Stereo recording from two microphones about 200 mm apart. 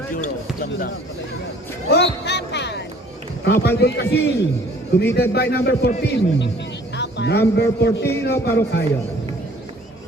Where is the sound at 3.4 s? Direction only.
60° left (ahead or behind).